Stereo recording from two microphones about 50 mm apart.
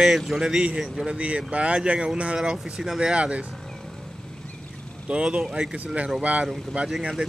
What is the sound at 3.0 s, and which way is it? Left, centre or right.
Speech, right.